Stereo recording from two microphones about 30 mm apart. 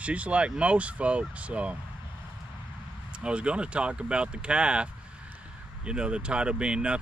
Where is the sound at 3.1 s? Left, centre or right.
Right.